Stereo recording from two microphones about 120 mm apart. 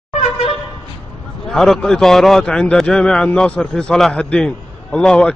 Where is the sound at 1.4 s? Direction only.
5° left (ahead or behind).